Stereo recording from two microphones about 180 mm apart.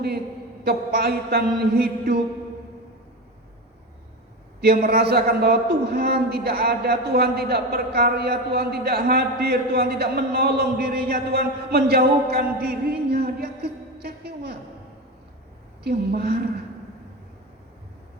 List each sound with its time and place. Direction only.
0.6 s a man's voice: 60° right (ahead or behind)
4.6 s a man's voice: 60° right (ahead or behind)
15.8 s a man's voice: 60° right (ahead or behind)